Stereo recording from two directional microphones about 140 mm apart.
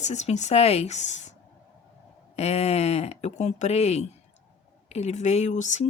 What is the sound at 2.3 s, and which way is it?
Speech, 50° left (ahead or behind).